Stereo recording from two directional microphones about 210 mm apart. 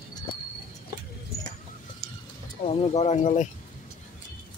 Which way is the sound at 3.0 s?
35° left (ahead or behind).